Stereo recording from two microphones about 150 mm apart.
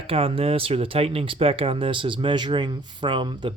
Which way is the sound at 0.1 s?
40° right (ahead or behind).